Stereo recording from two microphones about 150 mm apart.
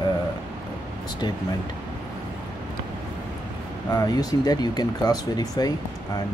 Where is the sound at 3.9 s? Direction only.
25° left (ahead or behind).